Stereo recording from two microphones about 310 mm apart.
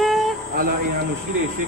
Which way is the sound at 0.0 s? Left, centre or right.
Centre.